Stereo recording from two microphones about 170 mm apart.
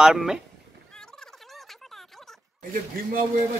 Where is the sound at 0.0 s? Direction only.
5° right (ahead or behind).